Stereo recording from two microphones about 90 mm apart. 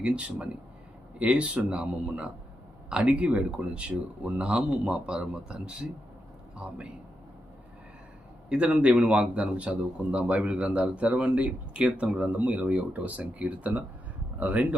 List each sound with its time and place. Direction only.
0.0 s a man's voice: 15° right (ahead or behind)
8.4 s a man's voice: 10° right (ahead or behind)